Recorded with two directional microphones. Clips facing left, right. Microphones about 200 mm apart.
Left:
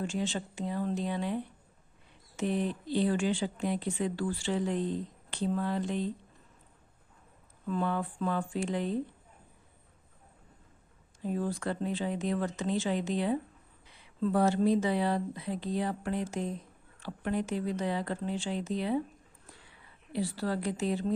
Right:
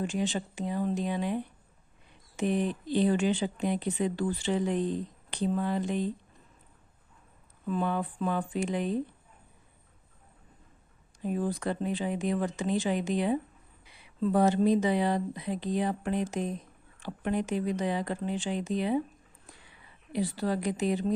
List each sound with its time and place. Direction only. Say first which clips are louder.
0.0 s speech: right 3 dB; 15° right (ahead or behind)
7.7 s speech: right 2 dB; 15° right (ahead or behind)
11.2 s speech: right 2 dB; 15° right (ahead or behind)
20.1 s speech: right 2 dB; 15° right (ahead or behind)